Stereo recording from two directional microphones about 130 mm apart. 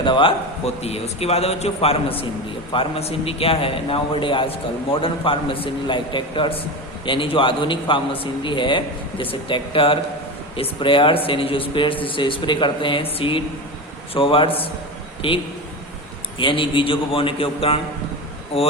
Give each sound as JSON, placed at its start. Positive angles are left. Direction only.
{"t": 0.0, "sound": "a man's voice", "side_deg": 40}
{"t": 16.4, "sound": "a man's voice", "side_deg": 40}